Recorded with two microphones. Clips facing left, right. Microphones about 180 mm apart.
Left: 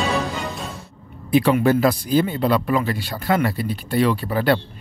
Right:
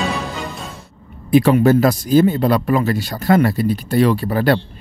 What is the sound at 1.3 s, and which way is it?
Speech, 45° right (ahead or behind).